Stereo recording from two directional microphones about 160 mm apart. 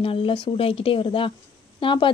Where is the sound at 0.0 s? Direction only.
35° left (ahead or behind).